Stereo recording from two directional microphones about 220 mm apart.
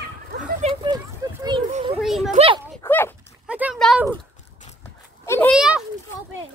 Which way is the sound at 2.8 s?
10° left (ahead or behind).